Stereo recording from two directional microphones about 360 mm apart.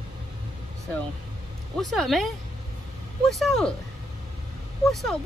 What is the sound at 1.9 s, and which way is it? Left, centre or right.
Speech, centre.